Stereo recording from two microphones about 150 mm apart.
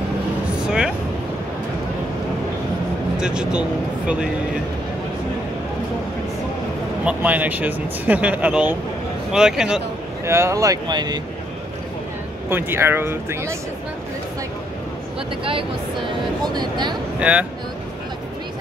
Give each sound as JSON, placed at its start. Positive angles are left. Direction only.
{"t": 0.7, "sound": "a sound", "side_deg": -5}
{"t": 3.2, "sound": "a man's voice", "side_deg": -5}
{"t": 7.1, "sound": "a man's voice", "side_deg": -10}
{"t": 10.2, "sound": "speech", "side_deg": -20}
{"t": 12.4, "sound": "speech", "side_deg": -15}
{"t": 16.4, "sound": "speech", "side_deg": -30}
{"t": 17.2, "sound": "speech", "side_deg": -10}